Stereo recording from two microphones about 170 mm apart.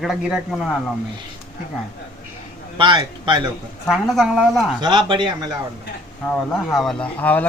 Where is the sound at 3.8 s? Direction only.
Centre (ahead or behind).